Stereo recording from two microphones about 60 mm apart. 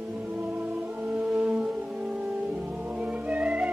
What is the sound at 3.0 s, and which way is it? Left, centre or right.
Music, right.